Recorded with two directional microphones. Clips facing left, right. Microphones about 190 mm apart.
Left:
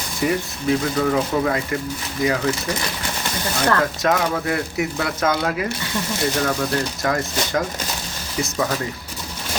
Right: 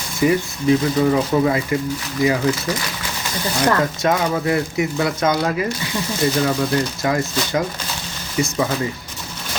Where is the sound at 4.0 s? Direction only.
Centre (ahead or behind).